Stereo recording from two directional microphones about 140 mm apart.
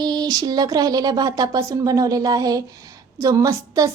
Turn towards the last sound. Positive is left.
turn(degrees=-25)  # may be behind; listen again after turning